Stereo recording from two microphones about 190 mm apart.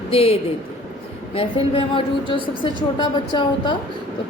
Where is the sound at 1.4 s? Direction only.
25° left (ahead or behind).